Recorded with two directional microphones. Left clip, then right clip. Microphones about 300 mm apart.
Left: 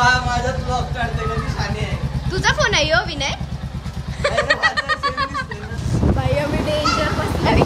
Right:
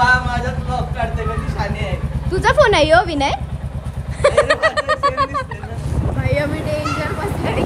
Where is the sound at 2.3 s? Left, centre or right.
Centre.